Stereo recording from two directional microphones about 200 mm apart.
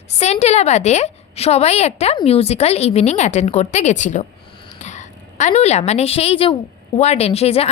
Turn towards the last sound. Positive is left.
turn(degrees=30)  # may be behind; listen again after turning